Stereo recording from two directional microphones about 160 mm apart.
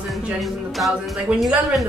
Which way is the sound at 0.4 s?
Centre (ahead or behind).